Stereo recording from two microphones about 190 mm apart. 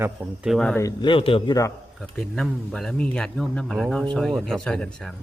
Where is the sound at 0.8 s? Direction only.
25° left (ahead or behind).